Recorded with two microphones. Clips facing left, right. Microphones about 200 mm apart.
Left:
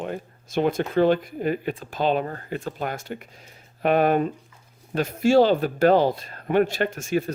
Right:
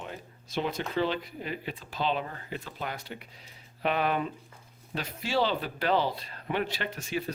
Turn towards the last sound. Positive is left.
turn(degrees=45)  # may be behind; listen again after turning